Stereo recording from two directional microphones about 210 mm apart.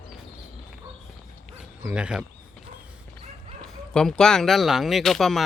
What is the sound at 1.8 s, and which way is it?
Speech, 5° right (ahead or behind).